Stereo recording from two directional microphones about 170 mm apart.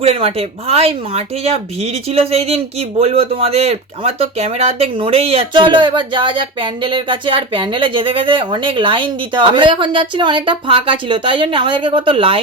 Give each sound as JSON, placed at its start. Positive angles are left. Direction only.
{"t": 0.0, "sound": "speech", "side_deg": -35}